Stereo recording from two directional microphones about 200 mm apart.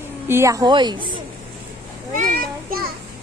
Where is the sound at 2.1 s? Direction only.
45° right (ahead or behind).